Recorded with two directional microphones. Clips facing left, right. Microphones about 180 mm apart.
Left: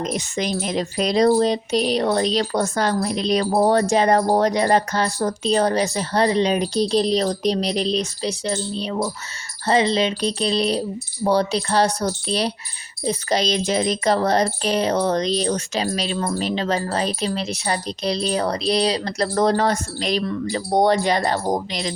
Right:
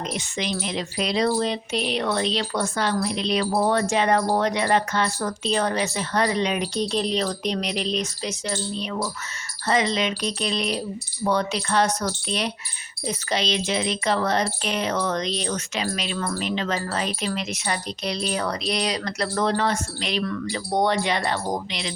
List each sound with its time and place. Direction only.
0.0 s speech: 45° left (ahead or behind)
16.1 s speech: 25° left (ahead or behind)
16.4 s speech: 35° left (ahead or behind)